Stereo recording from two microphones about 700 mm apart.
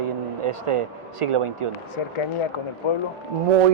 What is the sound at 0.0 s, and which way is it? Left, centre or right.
Speech, right.